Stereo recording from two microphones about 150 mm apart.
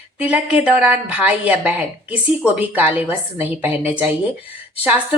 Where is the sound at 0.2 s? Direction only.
10° right (ahead or behind).